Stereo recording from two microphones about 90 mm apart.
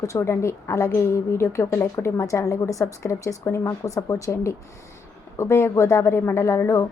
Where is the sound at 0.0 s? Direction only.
35° left (ahead or behind).